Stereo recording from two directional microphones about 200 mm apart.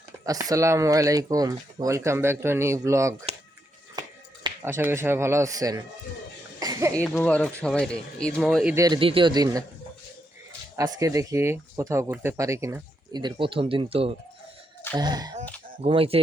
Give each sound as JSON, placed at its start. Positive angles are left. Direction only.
{"t": 0.3, "sound": "speech", "side_deg": -15}
{"t": 4.6, "sound": "speech", "side_deg": -10}
{"t": 6.6, "sound": "throat clearing", "side_deg": -15}
{"t": 6.9, "sound": "speech", "side_deg": 5}
{"t": 8.7, "sound": "speech", "side_deg": -20}
{"t": 10.8, "sound": "speech", "side_deg": -15}